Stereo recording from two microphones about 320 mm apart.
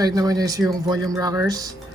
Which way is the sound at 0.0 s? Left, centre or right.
Centre.